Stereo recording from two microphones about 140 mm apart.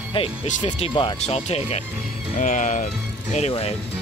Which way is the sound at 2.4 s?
60° left (ahead or behind).